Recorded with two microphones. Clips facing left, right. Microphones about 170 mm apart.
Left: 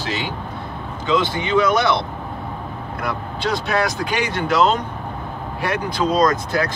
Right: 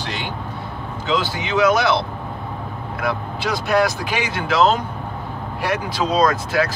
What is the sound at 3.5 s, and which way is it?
Speech, centre (ahead or behind).